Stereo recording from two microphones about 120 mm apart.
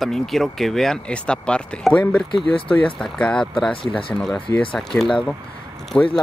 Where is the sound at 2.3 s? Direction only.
45° left (ahead or behind).